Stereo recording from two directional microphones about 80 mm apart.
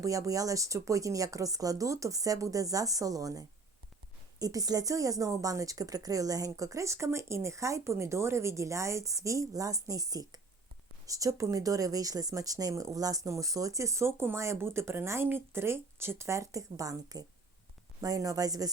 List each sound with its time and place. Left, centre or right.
0.0 s speech: right